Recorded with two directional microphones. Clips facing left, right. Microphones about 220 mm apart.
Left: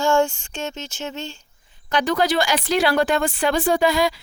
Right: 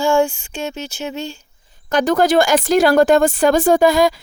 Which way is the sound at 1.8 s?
45° right (ahead or behind).